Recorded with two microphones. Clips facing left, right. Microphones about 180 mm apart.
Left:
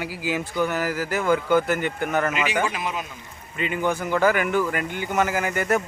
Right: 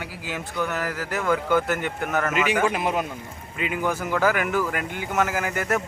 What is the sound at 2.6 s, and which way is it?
Speech, 55° right (ahead or behind).